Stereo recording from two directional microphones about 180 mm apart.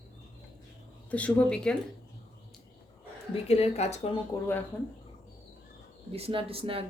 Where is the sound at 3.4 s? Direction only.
35° left (ahead or behind).